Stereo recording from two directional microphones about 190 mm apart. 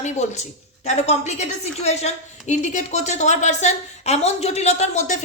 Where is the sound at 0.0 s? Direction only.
35° left (ahead or behind).